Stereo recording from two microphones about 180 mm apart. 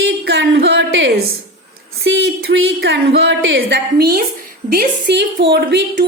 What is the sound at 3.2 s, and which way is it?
A woman's voice, 75° right (ahead or behind).